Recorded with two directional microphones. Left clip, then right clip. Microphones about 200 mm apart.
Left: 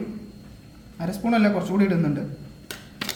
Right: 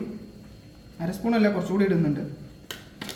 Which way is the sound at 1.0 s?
15° left (ahead or behind).